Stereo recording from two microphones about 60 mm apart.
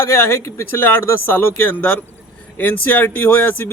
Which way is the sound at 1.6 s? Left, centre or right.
Left.